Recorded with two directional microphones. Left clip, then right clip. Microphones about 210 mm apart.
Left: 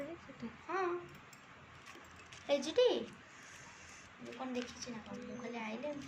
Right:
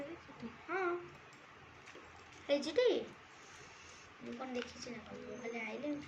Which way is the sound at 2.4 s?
10° right (ahead or behind).